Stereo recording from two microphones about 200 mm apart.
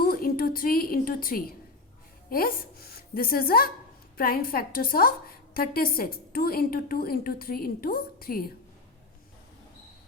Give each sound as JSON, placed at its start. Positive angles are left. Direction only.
{"t": 0.0, "sound": "a woman's voice", "side_deg": 45}